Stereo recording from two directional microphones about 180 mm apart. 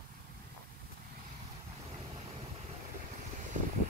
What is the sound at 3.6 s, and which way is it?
Vehicle, 45° right (ahead or behind).